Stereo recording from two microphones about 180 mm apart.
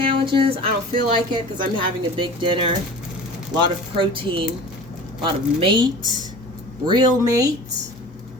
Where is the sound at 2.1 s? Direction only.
25° right (ahead or behind).